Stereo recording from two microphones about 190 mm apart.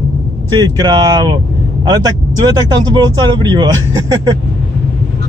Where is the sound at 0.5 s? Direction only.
20° right (ahead or behind).